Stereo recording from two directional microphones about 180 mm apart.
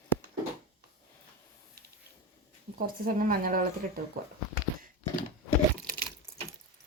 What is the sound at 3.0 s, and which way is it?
Speech, 50° right (ahead or behind).